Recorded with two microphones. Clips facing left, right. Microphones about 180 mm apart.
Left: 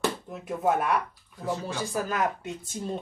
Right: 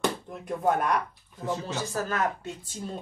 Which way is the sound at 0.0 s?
5° left (ahead or behind).